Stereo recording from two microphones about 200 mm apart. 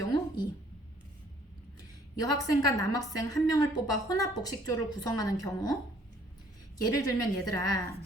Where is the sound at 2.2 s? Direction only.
20° left (ahead or behind).